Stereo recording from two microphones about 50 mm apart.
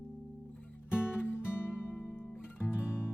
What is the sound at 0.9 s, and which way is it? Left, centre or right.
Music, left.